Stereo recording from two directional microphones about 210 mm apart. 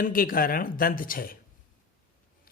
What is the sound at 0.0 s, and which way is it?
Speech, 40° left (ahead or behind).